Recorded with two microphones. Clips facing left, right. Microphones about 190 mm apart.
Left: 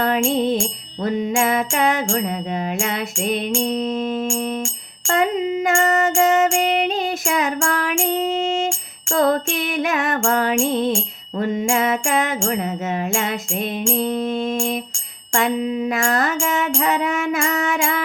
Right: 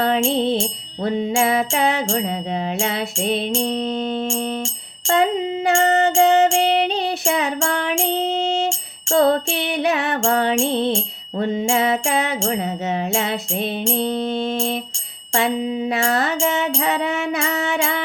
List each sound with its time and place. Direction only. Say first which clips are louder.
0.3 s music: even; 35° right (ahead or behind)
5.7 s music: right 3 dB; 35° right (ahead or behind)
13.9 s mantra: left 1 dB; 30° right (ahead or behind)
15.4 s music: left 1 dB; 35° right (ahead or behind)